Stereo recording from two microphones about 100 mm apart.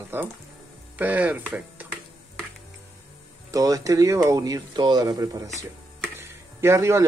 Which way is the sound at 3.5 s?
40° right (ahead or behind).